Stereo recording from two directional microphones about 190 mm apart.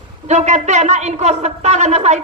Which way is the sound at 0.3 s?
35° right (ahead or behind).